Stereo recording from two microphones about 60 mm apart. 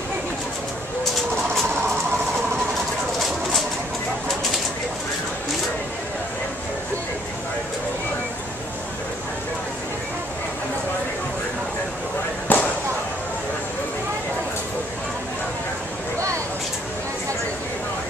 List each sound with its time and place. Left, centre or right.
12.5 s basketball bounce: left